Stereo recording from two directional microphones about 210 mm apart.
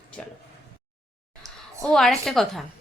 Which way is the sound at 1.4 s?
15° right (ahead or behind).